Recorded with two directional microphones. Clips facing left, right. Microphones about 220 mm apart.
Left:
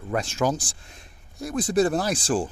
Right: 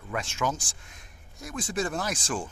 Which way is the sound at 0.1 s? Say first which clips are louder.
Left 6 dB; 35° left (ahead or behind).